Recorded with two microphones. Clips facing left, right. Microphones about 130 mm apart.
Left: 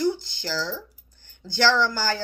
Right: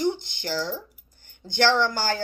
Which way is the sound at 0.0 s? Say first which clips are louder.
Left 1 dB; 20° right (ahead or behind).